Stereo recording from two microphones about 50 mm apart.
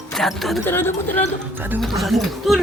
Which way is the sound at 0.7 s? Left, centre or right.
Left.